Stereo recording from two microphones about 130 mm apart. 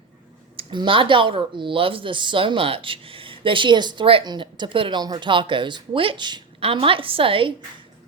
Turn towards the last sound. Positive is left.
turn(degrees=-45)  # may be behind; listen again after turning